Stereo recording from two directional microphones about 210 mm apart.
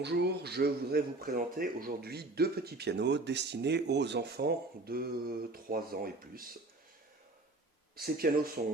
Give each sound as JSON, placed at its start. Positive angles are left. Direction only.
{"t": 0.0, "sound": "speech", "side_deg": -50}
{"t": 7.9, "sound": "speech", "side_deg": -45}